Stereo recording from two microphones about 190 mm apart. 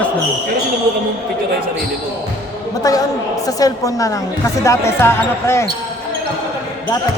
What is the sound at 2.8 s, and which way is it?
A woman's voice, 20° left (ahead or behind).